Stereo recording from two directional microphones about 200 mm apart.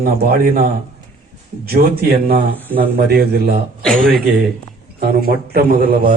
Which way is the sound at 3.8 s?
Centre (ahead or behind).